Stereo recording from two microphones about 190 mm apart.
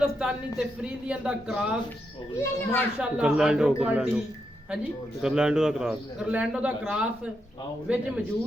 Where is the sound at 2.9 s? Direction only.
5° right (ahead or behind).